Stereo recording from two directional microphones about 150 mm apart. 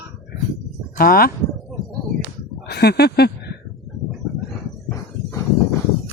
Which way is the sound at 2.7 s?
90° left.